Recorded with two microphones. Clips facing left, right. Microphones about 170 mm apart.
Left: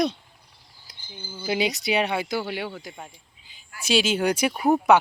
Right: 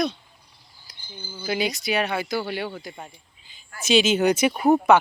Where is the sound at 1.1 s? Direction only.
15° left (ahead or behind); by 4.8 s centre (ahead or behind).